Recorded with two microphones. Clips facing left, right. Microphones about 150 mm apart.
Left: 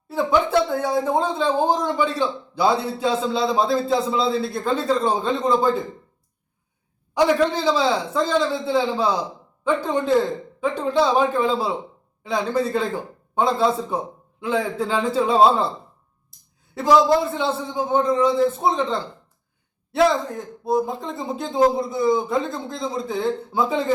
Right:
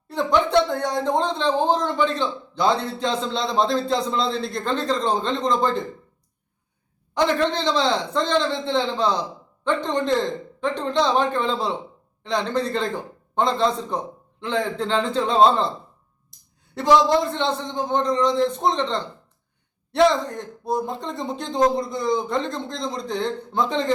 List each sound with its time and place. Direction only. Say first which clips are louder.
0.1 s speech: even; 5° left (ahead or behind)
7.1 s speech: left 3 dB; 10° left (ahead or behind)
16.3 s a sound: even; centre (ahead or behind)
16.7 s speech: left 1 dB; centre (ahead or behind)